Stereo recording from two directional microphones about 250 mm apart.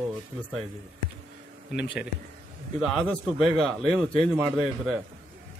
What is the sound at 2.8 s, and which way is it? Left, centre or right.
Speech, centre.